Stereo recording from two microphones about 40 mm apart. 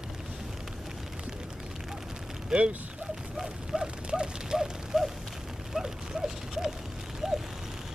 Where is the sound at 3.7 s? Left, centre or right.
Right.